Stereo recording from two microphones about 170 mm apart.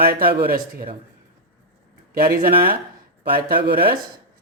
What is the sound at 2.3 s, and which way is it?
Speech, 60° right (ahead or behind).